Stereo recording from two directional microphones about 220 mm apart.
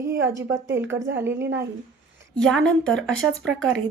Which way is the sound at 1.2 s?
10° right (ahead or behind).